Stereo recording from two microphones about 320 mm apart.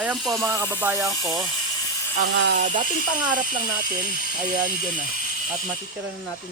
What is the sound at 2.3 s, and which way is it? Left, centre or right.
Speech, right.